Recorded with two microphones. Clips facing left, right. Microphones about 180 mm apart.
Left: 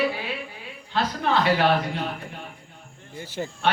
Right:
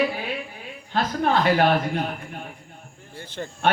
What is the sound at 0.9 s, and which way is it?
Speech, 50° right (ahead or behind).